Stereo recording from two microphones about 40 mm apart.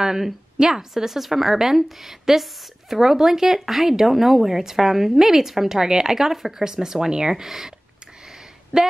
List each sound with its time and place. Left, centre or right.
0.0 s speech: centre
8.7 s speech: right